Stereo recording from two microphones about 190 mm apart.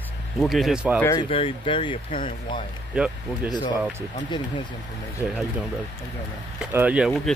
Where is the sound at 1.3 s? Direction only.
30° left (ahead or behind).